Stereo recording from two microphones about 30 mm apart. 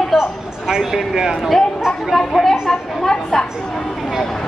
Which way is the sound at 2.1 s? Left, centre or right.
Centre.